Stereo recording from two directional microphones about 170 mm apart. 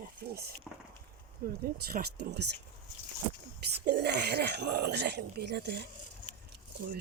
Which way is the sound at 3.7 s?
75° right (ahead or behind).